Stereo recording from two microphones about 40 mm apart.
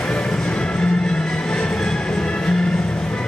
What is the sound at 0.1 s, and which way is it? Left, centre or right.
Music, centre.